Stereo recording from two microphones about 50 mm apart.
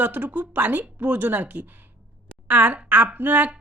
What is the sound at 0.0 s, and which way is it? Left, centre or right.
Speech, right.